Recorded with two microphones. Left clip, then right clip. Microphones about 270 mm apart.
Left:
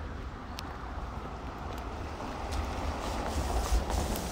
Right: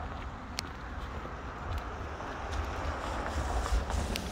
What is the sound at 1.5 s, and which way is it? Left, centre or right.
Vehicle, left.